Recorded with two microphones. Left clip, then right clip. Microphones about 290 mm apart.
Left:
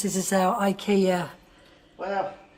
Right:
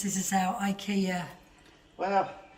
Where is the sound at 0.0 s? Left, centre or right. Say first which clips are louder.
Left 6 dB; centre.